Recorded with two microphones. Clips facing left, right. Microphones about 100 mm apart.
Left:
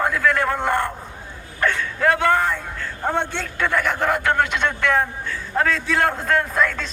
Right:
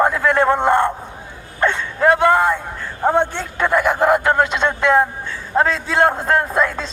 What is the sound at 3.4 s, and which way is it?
A man's voice, 20° right (ahead or behind).